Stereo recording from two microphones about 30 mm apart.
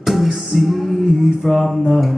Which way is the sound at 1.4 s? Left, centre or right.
Centre.